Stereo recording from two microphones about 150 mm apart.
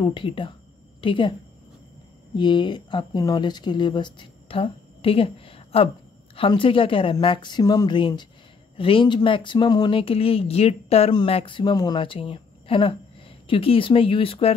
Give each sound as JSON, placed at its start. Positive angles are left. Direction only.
{"t": 0.0, "sound": "speech", "side_deg": 35}
{"t": 2.3, "sound": "speech", "side_deg": 30}